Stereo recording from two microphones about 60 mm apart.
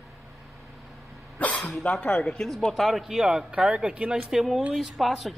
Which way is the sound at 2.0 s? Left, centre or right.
Centre.